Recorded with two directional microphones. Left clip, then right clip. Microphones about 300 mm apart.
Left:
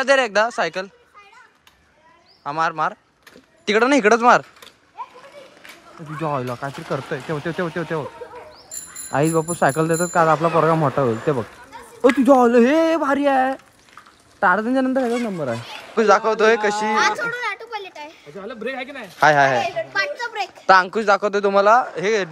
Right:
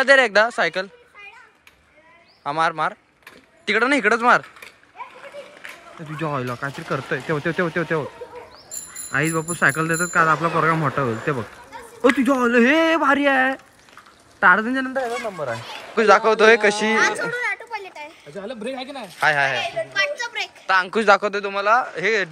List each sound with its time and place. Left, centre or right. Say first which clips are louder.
0.0 s speech: right 2 dB; centre
2.4 s speech: even; centre
6.0 s speech: left 2 dB; centre
17.6 s a sound: left 1 dB; left
18.6 s speech: left 4 dB; centre
19.1 s speech: left 4 dB; centre
19.6 s a woman's voice: even; left
20.7 s speech: left 1 dB; centre